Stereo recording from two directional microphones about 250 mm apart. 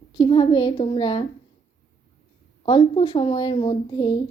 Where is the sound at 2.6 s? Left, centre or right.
Centre.